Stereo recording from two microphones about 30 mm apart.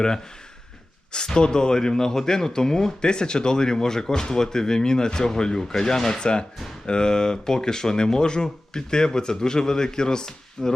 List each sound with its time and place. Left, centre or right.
1.1 s speech: left